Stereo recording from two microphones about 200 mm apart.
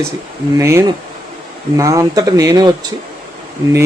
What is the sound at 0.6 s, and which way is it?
Speech, 15° right (ahead or behind).